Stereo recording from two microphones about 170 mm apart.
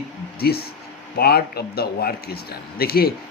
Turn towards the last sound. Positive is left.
turn(degrees=65)  # may be behind; listen again after turning